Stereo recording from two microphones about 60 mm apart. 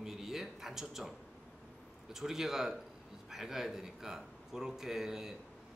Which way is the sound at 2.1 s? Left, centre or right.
Centre.